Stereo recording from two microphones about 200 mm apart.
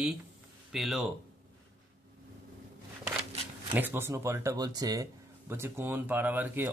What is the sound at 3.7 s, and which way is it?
Speech, 10° right (ahead or behind).